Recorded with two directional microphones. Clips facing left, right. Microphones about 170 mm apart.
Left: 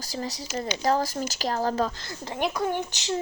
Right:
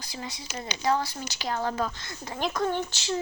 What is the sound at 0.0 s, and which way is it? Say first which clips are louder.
Speech: left 6 dB; 40° left (ahead or behind).